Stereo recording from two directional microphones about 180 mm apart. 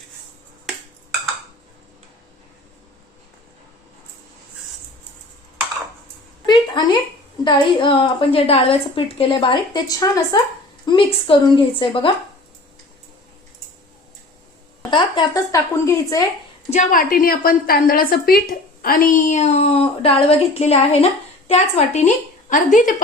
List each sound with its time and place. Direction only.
6.4 s a sound: 25° left (ahead or behind)
7.4 s a woman's voice: 25° left (ahead or behind)
14.8 s a woman's voice: 25° left (ahead or behind)
16.6 s a woman's voice: 40° left (ahead or behind)